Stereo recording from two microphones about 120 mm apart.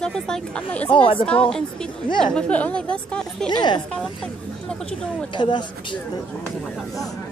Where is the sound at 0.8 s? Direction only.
50° left (ahead or behind).